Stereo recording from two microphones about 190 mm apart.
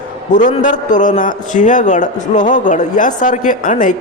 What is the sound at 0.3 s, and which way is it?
A man's voice, 40° left (ahead or behind).